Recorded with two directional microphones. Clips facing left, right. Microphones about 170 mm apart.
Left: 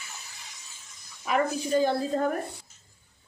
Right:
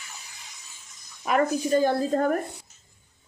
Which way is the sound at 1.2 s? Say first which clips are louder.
Right 3 dB; 50° right (ahead or behind).